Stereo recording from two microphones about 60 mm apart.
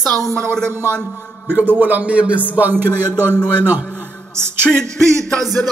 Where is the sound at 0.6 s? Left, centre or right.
Right.